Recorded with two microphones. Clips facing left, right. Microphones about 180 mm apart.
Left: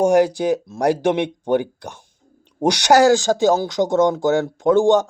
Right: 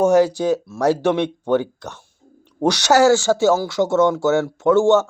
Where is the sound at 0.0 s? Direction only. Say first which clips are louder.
Even; 15° left (ahead or behind).